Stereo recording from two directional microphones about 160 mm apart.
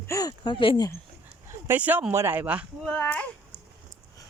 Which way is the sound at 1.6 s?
10° right (ahead or behind).